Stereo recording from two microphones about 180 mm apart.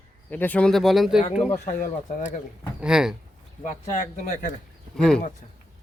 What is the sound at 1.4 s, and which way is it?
Speech, 40° left (ahead or behind).